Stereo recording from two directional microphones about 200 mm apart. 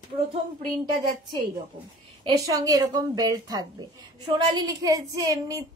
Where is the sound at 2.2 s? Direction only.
15° right (ahead or behind).